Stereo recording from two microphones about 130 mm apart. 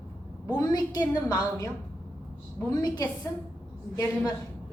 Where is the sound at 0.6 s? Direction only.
30° left (ahead or behind).